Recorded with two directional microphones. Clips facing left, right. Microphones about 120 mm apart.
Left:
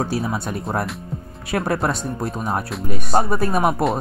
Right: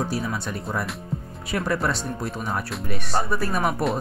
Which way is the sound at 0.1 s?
30° left (ahead or behind).